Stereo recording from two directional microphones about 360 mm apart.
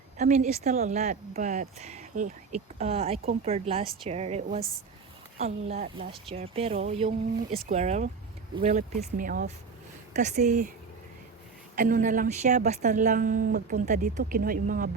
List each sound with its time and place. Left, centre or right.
0.2 s a woman's voice: centre
11.8 s a woman's voice: right